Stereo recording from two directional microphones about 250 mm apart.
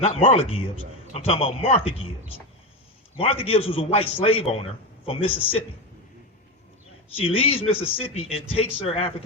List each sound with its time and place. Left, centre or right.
0.0 s a man's voice: left
3.2 s a man's voice: left
7.2 s a man's voice: left